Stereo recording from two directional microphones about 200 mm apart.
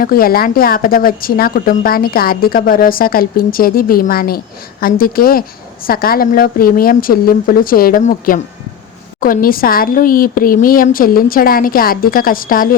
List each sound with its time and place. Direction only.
0.0 s speech: 45° left (ahead or behind)